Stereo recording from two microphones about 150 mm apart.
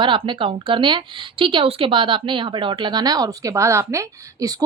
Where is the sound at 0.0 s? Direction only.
35° right (ahead or behind).